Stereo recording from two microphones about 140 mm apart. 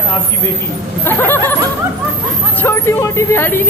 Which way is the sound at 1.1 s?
15° left (ahead or behind).